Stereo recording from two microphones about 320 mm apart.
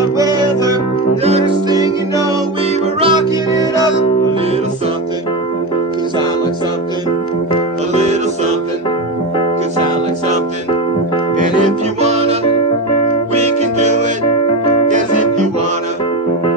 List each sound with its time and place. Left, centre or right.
0.2 s music: centre
12.0 s music: centre